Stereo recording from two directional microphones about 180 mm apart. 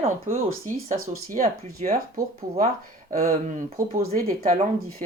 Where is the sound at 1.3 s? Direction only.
45° right (ahead or behind).